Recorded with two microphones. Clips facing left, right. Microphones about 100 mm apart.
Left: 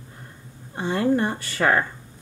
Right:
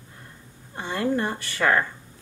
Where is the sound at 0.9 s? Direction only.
20° left (ahead or behind).